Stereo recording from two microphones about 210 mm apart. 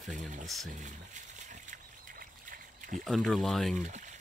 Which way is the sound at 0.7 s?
35° right (ahead or behind).